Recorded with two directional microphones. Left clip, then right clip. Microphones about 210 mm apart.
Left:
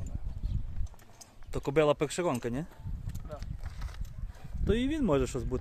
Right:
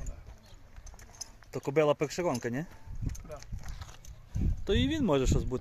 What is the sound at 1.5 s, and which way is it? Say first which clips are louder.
Speech: even; 10° left (ahead or behind).